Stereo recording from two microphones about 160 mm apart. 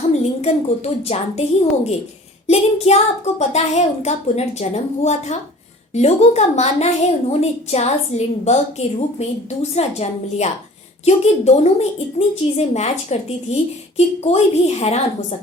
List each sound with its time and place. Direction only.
0.2 s a woman's voice: 40° left (ahead or behind)